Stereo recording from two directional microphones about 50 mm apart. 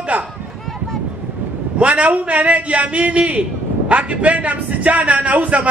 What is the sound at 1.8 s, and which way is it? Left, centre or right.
A man's voice, right.